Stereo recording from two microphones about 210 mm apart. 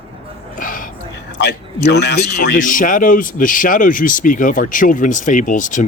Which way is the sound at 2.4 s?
40° left (ahead or behind).